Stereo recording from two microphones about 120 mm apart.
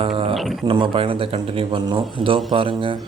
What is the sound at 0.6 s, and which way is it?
Speech, 45° right (ahead or behind).